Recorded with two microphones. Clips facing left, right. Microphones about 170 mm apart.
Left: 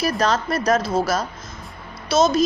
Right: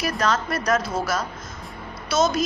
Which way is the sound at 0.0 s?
35° left (ahead or behind).